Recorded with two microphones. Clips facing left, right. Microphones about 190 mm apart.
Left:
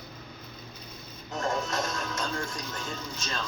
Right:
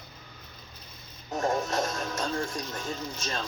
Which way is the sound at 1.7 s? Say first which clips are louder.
Right 2 dB; 30° right (ahead or behind).